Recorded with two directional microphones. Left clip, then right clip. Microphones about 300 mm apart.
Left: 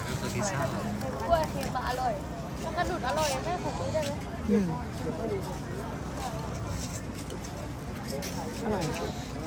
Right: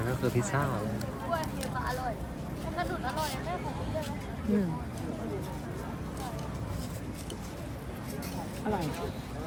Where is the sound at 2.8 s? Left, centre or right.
Left.